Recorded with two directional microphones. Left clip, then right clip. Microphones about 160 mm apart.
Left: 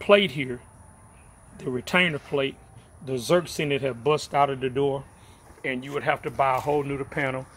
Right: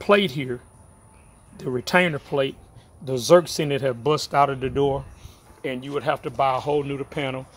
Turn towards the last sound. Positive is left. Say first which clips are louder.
# even
turn(degrees=-20)  # may be behind; listen again after turning